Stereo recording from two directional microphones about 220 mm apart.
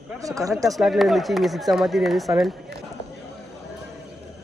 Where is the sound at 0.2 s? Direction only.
15° right (ahead or behind).